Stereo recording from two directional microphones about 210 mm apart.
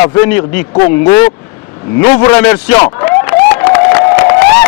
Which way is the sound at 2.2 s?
15° left (ahead or behind).